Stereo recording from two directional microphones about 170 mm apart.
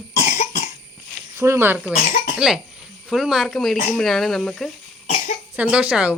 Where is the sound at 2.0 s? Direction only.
50° left (ahead or behind).